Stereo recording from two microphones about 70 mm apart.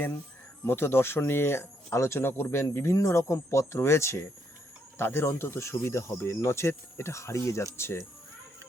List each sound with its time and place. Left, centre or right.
0.6 s speech: left